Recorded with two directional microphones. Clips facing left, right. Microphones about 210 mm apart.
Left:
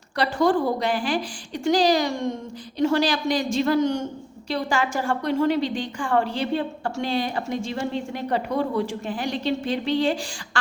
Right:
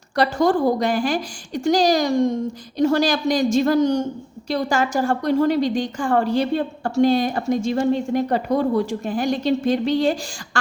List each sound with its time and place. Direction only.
0.3 s a woman's voice: 40° right (ahead or behind)